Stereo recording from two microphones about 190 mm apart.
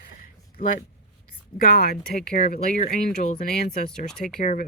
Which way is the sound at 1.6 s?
50° left (ahead or behind).